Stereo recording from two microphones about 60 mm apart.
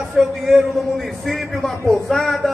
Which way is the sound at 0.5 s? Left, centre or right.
Centre.